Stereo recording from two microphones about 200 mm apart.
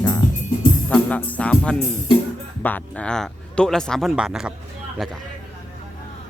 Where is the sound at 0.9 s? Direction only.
5° left (ahead or behind).